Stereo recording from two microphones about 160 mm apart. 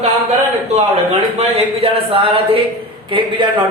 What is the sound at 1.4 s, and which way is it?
A man's voice, 40° right (ahead or behind).